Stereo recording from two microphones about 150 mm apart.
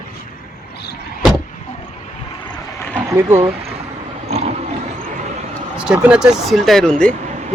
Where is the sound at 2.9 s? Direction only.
15° right (ahead or behind).